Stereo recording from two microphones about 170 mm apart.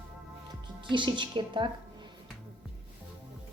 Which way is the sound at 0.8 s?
30° right (ahead or behind).